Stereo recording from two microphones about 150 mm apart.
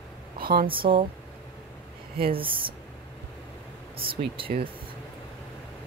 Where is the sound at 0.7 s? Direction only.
35° right (ahead or behind).